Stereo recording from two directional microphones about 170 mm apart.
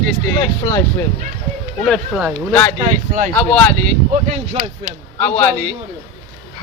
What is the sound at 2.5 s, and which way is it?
Speech, 10° left (ahead or behind).